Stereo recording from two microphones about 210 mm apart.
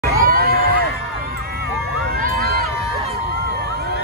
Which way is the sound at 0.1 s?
45° right (ahead or behind).